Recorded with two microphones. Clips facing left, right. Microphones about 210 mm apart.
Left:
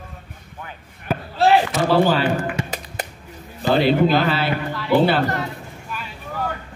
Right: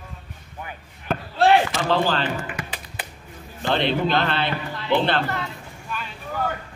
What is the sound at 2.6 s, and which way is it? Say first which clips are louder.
Finger snapping: left 6 dB; 45° left (ahead or behind).